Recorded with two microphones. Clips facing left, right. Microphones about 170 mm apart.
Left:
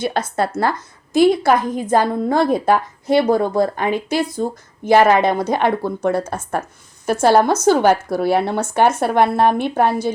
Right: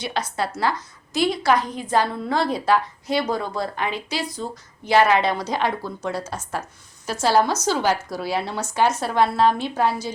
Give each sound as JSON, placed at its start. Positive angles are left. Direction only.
{"t": 0.0, "sound": "a woman's voice", "side_deg": 50}